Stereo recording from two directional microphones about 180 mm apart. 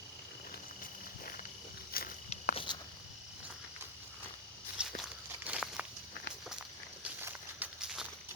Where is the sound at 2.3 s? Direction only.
35° left (ahead or behind).